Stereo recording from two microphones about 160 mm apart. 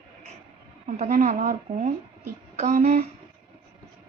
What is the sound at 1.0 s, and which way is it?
A woman's voice, 55° right (ahead or behind).